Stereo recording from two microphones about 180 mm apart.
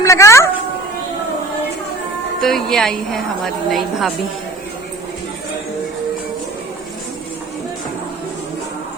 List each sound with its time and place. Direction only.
0.0 s a woman's voice: 15° left (ahead or behind)
2.4 s a woman's voice: centre (ahead or behind)